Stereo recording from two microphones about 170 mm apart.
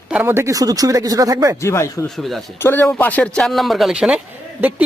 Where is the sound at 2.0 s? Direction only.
Centre (ahead or behind).